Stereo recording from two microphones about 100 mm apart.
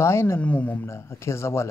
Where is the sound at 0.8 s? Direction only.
25° left (ahead or behind).